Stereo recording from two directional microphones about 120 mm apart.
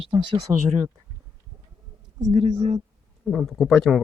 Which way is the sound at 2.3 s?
75° right (ahead or behind).